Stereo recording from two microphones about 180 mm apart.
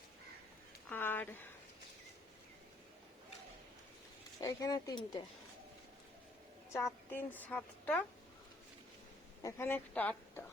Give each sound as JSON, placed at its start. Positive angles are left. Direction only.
{"t": 0.9, "sound": "a sound", "side_deg": 10}
{"t": 4.4, "sound": "speech", "side_deg": 20}
{"t": 6.7, "sound": "a woman's voice", "side_deg": 15}
{"t": 9.4, "sound": "a woman's voice", "side_deg": 15}